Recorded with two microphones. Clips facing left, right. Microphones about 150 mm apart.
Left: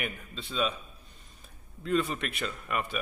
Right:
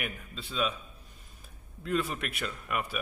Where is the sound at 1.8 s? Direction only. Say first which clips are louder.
Left 2 dB; 5° right (ahead or behind).